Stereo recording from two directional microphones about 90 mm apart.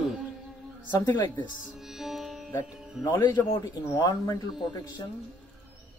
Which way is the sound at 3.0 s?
55° left (ahead or behind).